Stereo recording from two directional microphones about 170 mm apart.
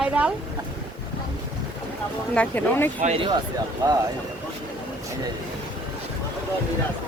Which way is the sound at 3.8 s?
25° right (ahead or behind).